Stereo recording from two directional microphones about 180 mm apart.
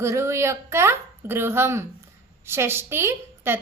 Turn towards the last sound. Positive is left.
turn(degrees=-15)  # may be behind; listen again after turning